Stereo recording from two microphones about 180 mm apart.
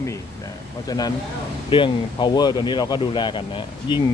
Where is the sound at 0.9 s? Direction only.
20° left (ahead or behind).